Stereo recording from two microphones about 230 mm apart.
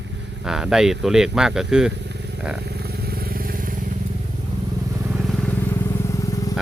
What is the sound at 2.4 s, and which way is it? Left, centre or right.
Speech, centre.